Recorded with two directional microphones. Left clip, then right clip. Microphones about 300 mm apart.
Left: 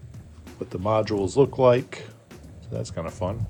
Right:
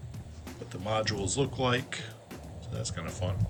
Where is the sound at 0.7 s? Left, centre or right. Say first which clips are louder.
Left 8 dB; centre.